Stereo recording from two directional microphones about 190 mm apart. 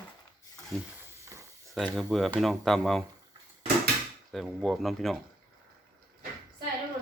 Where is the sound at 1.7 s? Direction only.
Centre (ahead or behind).